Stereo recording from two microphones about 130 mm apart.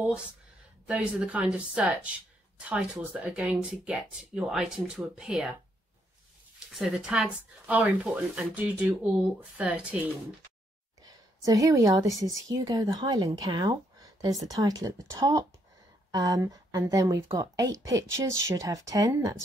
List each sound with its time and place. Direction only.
0.0 s speech: 5° right (ahead or behind)
6.7 s speech: 5° right (ahead or behind)
11.0 s a sound: 25° right (ahead or behind)
12.4 s speech: 25° right (ahead or behind)